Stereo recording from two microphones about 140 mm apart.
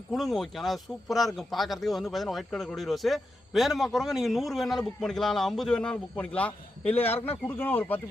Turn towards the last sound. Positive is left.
turn(degrees=15)  # may be behind; listen again after turning